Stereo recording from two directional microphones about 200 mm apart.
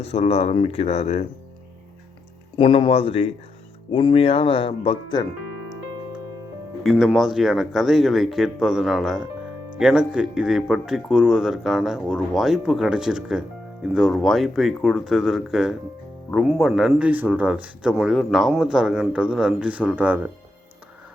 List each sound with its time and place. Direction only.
0.0 s speech: 30° left (ahead or behind)
2.6 s speech: 25° left (ahead or behind)
6.8 s speech: centre (ahead or behind)